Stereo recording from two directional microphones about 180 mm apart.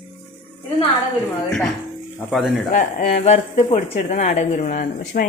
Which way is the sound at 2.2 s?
Centre (ahead or behind).